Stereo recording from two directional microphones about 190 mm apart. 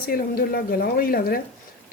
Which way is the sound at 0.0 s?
50° left (ahead or behind).